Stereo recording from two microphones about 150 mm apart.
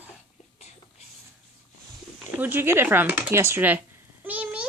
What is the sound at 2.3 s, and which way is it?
Speech, 15° right (ahead or behind).